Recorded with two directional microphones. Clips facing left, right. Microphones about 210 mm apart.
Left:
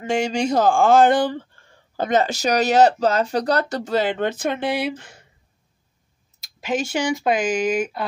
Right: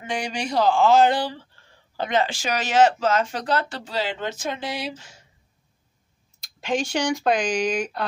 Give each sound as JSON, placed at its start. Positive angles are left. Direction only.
{"t": 0.0, "sound": "speech", "side_deg": 45}
{"t": 6.4, "sound": "speech", "side_deg": 5}